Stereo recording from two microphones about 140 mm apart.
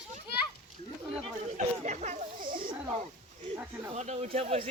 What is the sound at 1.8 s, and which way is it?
Speech, 60° right (ahead or behind).